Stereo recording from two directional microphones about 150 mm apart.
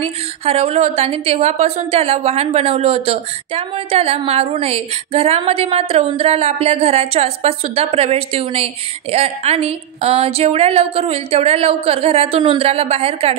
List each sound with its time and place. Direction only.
0.0 s a woman's voice: 40° right (ahead or behind)